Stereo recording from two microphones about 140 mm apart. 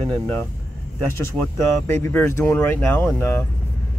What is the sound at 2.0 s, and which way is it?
Speech, 20° left (ahead or behind).